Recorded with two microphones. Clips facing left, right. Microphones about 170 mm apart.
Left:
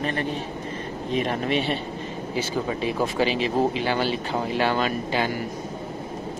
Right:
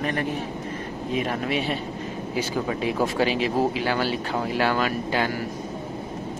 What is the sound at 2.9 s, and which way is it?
Speech, 15° left (ahead or behind).